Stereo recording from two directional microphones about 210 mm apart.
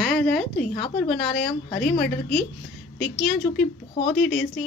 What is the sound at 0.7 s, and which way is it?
Speech, 25° left (ahead or behind).